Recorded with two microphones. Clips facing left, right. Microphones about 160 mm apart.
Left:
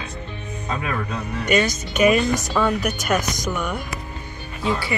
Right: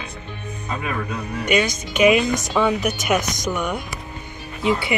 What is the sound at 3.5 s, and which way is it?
Speech, 15° right (ahead or behind).